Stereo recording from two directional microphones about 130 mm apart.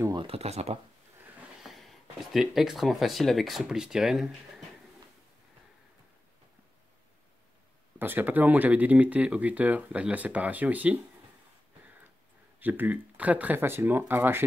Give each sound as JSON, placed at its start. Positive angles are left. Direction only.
{"t": 0.1, "sound": "speech", "side_deg": -45}
{"t": 1.6, "sound": "speech", "side_deg": 0}
{"t": 8.0, "sound": "speech", "side_deg": -15}
{"t": 12.5, "sound": "speech", "side_deg": -15}